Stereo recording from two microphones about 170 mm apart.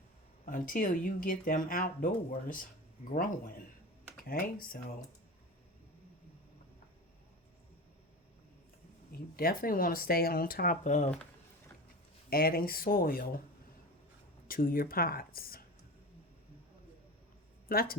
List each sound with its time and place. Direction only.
0.4 s speech: 50° left (ahead or behind)
9.3 s speech: 60° left (ahead or behind)
12.3 s speech: 60° left (ahead or behind)
14.4 s speech: 55° left (ahead or behind)
17.7 s speech: 60° left (ahead or behind)